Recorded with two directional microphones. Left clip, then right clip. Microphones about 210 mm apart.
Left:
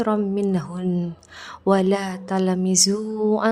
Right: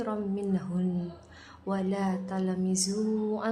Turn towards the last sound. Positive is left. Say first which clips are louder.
# left 9 dB
turn(degrees=40)  # may be behind; listen again after turning